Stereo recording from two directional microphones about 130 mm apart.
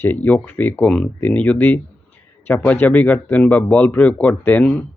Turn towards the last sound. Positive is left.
turn(degrees=10)  # may be behind; listen again after turning